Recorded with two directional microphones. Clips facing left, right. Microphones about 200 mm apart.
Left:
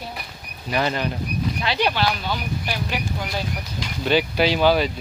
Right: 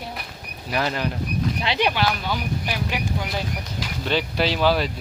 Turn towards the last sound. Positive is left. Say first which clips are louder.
# left 3 dB
turn(degrees=0)  # may be behind; listen again after turning